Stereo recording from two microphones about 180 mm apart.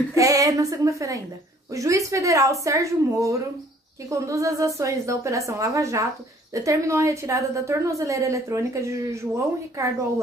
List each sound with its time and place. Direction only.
0.1 s a woman's voice: 20° right (ahead or behind)